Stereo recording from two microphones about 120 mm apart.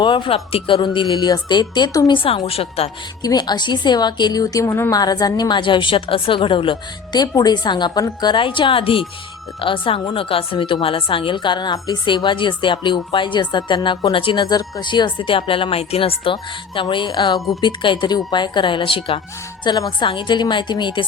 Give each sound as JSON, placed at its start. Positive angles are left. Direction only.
{"t": 0.0, "sound": "a woman's voice", "side_deg": 40}
{"t": 2.1, "sound": "speech", "side_deg": 50}
{"t": 3.2, "sound": "a woman's voice", "side_deg": 35}
{"t": 19.6, "sound": "a woman's voice", "side_deg": 35}